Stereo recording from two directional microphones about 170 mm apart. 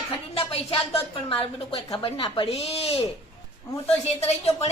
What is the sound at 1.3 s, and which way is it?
A woman's voice, 35° left (ahead or behind).